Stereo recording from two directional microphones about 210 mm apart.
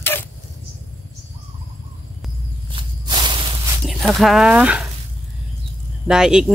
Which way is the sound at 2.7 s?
20° right (ahead or behind).